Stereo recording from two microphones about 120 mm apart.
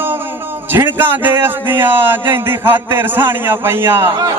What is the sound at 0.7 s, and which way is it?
A man's voice, 15° right (ahead or behind).